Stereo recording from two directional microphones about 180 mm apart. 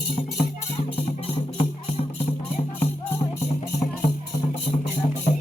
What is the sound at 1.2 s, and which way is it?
Music, 35° left (ahead or behind).